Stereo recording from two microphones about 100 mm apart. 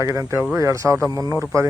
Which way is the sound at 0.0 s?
30° right (ahead or behind).